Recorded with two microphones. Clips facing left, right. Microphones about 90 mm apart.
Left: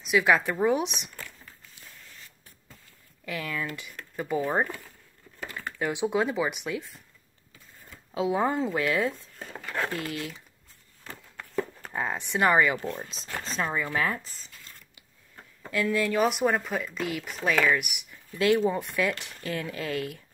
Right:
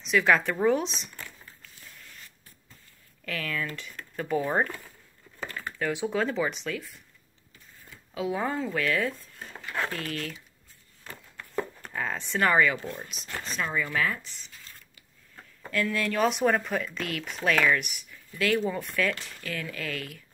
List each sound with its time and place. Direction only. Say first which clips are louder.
0.0 s speech: even; 10° left (ahead or behind)
3.3 s speech: even; 20° left (ahead or behind)
5.5 s speech: even; 20° left (ahead or behind)
8.1 s speech: left 4 dB; 25° left (ahead or behind)
11.9 s speech: left 1 dB; 20° left (ahead or behind)
13.1 s speech: left 1 dB; 30° left (ahead or behind)
15.3 s speech: even; 15° left (ahead or behind)
18.1 s speech: left 3 dB; 25° left (ahead or behind)